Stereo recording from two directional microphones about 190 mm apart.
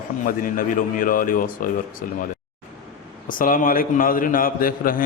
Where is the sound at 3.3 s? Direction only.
45° left (ahead or behind).